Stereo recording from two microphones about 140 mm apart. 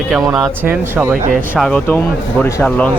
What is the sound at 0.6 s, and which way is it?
Speech, 15° right (ahead or behind).